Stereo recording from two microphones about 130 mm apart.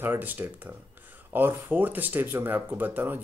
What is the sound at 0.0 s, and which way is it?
Speech, 15° right (ahead or behind).